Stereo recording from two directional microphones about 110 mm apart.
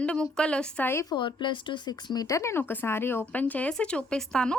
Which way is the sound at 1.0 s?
45° left (ahead or behind).